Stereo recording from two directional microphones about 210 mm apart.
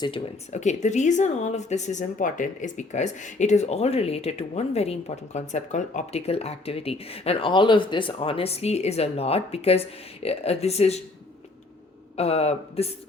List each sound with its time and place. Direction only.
0.0 s speech: 30° left (ahead or behind)
12.1 s speech: 30° left (ahead or behind)